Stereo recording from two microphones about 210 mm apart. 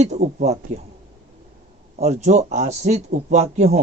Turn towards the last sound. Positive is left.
turn(degrees=-30)  # may be behind; listen again after turning